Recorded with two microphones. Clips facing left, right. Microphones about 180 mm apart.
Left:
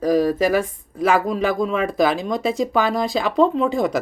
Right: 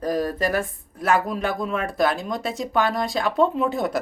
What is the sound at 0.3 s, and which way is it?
Speech, 90° left.